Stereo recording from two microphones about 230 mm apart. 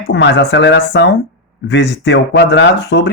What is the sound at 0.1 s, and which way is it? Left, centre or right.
Speech, left.